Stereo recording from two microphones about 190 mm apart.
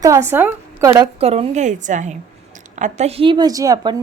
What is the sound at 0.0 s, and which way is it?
A woman's voice, 15° right (ahead or behind).